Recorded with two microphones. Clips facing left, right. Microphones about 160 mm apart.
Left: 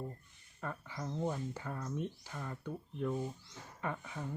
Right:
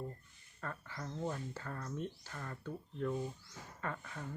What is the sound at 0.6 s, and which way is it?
Speech, 15° left (ahead or behind).